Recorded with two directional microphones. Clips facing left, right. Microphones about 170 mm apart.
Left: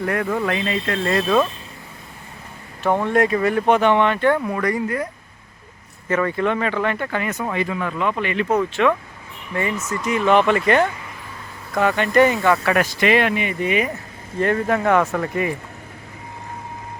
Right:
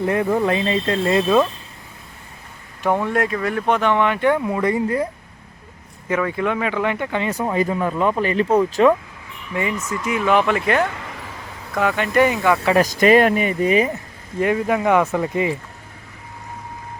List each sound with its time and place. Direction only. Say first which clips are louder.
0.0 s speech: right 3 dB; 20° right (ahead or behind)
2.8 s speech: left 2 dB; 10° right (ahead or behind); by 5.0 s 25° right (ahead or behind)
6.1 s speech: left 1 dB; 5° right (ahead or behind)
7.5 s speech: right 4 dB; 35° right (ahead or behind)
10.0 s speech: left 2 dB; 5° right (ahead or behind)
12.8 s speech: right 4 dB; 40° right (ahead or behind)
14.3 s speech: right 1 dB; 10° right (ahead or behind)